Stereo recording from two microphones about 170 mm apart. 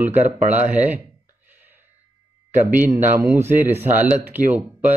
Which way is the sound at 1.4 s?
10° right (ahead or behind).